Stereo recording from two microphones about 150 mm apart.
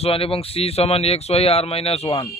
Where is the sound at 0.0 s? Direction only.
40° left (ahead or behind).